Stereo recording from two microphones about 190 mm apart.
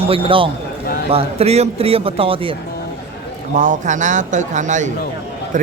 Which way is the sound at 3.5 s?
40° right (ahead or behind).